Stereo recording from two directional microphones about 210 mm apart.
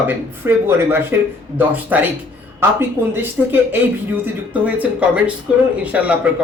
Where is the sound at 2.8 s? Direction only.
10° right (ahead or behind).